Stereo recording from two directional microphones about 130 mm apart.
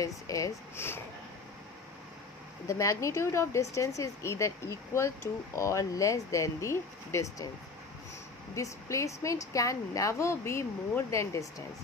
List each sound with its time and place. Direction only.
0.0 s speech: 25° left (ahead or behind)
2.7 s speech: 25° left (ahead or behind)
8.5 s speech: 25° left (ahead or behind)